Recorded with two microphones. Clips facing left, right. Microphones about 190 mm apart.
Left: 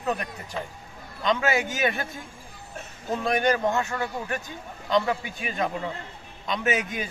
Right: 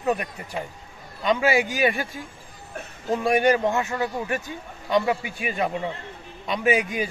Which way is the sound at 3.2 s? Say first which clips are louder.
Right 4 dB; 10° right (ahead or behind).